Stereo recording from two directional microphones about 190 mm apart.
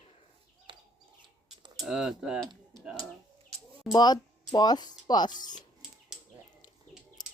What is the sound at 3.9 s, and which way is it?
Speech, 20° left (ahead or behind).